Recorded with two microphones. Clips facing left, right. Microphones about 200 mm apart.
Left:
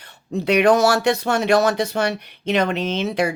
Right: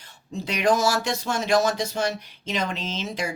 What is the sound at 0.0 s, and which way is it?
Speech, 65° left (ahead or behind).